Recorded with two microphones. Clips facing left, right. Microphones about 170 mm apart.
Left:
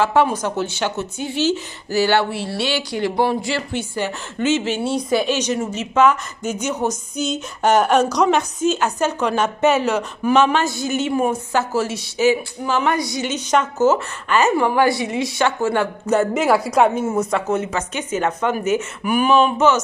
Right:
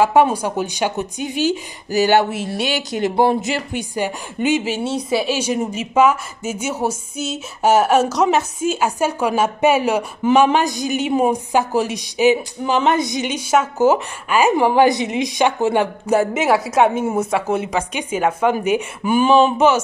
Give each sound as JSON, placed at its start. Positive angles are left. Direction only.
{"t": 0.0, "sound": "a woman's voice", "side_deg": -15}
{"t": 4.8, "sound": "a woman's voice", "side_deg": -5}
{"t": 19.0, "sound": "speech", "side_deg": -25}